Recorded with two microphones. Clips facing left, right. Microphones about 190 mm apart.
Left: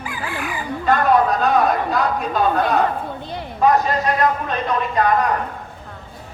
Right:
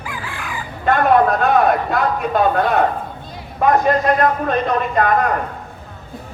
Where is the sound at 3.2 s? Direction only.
70° left (ahead or behind).